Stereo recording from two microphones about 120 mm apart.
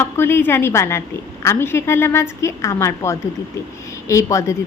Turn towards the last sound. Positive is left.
turn(degrees=25)  # may be behind; listen again after turning